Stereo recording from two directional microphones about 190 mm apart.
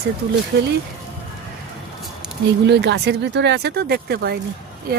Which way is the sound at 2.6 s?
60° right (ahead or behind).